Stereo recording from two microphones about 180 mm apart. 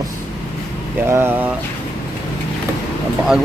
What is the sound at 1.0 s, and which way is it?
Speech, 15° right (ahead or behind).